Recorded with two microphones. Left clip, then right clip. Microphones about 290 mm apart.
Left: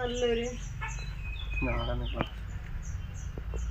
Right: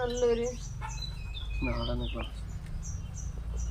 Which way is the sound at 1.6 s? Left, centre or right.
Left.